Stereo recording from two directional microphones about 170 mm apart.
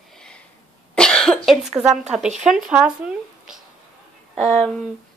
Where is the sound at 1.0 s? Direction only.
5° left (ahead or behind).